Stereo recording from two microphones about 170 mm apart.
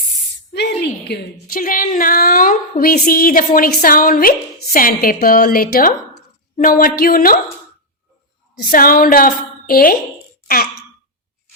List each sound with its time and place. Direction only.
0.5 s a woman's voice: 75° left (ahead or behind); by 7.3 s 60° left (ahead or behind)
8.7 s a woman's voice: 60° left (ahead or behind)
10.4 s throat clearing: 65° left (ahead or behind)